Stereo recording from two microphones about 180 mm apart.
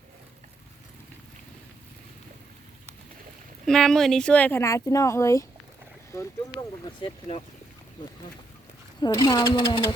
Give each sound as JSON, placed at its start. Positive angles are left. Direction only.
{"t": 3.7, "sound": "speech", "side_deg": 0}
{"t": 7.0, "sound": "speech", "side_deg": 35}
{"t": 9.0, "sound": "speech", "side_deg": 20}